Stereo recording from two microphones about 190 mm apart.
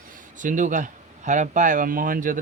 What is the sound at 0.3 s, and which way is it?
Speech, 40° right (ahead or behind).